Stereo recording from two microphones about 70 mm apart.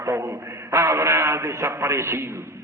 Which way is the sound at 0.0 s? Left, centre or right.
Right.